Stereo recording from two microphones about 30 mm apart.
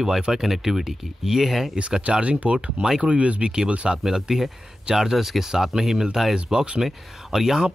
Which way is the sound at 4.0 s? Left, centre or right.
Centre.